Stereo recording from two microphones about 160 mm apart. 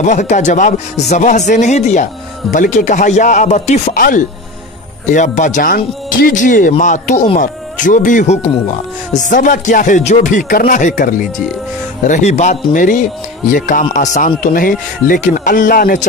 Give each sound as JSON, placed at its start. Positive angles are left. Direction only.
{"t": 0.0, "sound": "speech", "side_deg": 45}
{"t": 4.0, "sound": "speech", "side_deg": 60}